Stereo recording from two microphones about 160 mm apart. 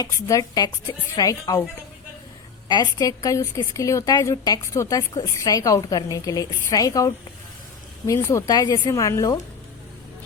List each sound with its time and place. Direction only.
0.0 s a woman's voice: 20° left (ahead or behind)
2.6 s a woman's voice: 25° left (ahead or behind)